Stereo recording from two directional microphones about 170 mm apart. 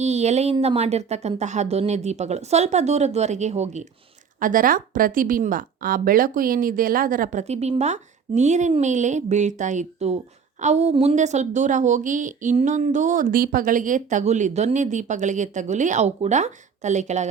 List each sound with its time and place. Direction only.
0.0 s speech: 40° right (ahead or behind)
4.4 s a woman's voice: 50° right (ahead or behind)